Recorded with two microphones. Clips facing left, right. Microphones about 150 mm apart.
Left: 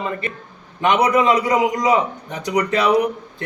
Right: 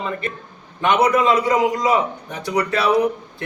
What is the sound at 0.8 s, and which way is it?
A man's voice, 15° left (ahead or behind).